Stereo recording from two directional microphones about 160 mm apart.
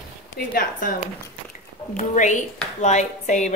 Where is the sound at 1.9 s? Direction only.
50° left (ahead or behind).